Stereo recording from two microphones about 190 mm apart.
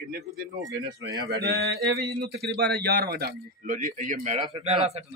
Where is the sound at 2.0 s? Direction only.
60° right (ahead or behind); by 4.4 s 40° right (ahead or behind).